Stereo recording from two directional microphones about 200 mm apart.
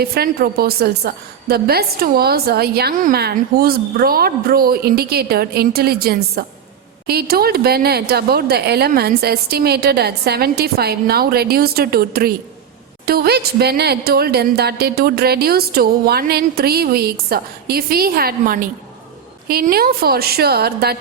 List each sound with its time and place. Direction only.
0.0 s a woman's voice: 50° right (ahead or behind)